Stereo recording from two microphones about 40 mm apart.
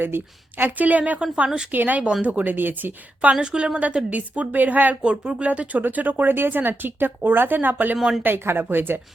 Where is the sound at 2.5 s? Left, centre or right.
Right.